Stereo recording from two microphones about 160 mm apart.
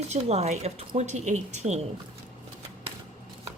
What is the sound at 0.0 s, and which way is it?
A woman's voice, 45° right (ahead or behind).